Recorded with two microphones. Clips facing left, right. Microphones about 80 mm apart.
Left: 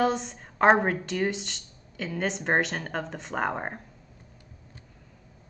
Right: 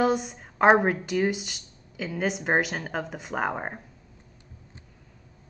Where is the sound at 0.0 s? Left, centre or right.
Centre.